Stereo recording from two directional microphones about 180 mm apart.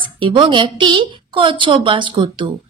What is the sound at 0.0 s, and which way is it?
Speech, 25° right (ahead or behind).